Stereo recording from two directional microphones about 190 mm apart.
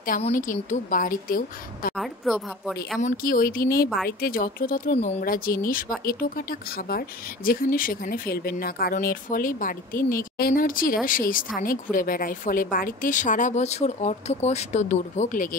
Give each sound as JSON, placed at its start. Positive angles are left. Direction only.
{"t": 0.3, "sound": "speech", "side_deg": 45}
{"t": 2.0, "sound": "speech", "side_deg": 0}
{"t": 3.0, "sound": "speech", "side_deg": 45}